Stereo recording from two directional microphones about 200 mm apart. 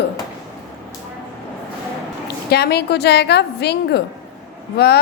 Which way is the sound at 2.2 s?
55° left (ahead or behind).